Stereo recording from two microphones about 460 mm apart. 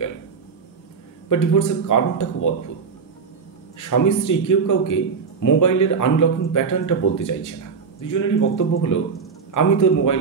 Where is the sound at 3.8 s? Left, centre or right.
Left.